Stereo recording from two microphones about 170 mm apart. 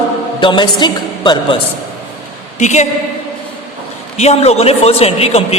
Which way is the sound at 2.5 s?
45° left (ahead or behind).